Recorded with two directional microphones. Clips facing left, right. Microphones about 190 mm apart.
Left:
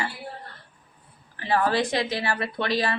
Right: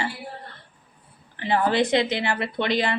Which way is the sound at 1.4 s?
20° right (ahead or behind).